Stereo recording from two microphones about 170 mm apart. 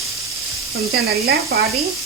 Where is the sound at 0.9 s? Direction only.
65° right (ahead or behind).